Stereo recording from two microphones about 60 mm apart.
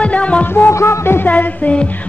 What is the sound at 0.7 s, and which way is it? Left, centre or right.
Music, left.